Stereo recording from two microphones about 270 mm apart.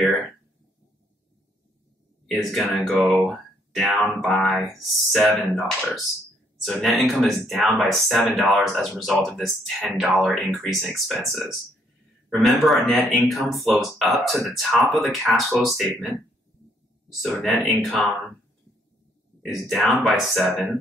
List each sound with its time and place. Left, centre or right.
2.2 s speech: centre
17.2 s speech: centre
19.4 s speech: centre